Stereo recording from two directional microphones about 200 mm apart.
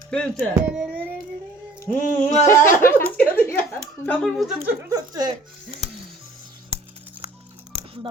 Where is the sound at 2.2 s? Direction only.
40° left (ahead or behind).